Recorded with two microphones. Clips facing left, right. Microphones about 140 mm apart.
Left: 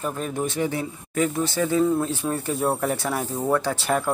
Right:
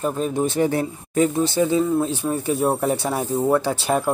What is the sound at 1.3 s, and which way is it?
Speech, 20° right (ahead or behind).